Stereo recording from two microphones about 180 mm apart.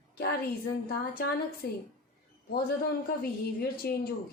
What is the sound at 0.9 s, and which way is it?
Speech, 55° left (ahead or behind).